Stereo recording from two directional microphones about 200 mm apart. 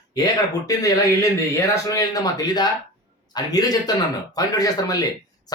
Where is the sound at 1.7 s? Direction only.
15° left (ahead or behind).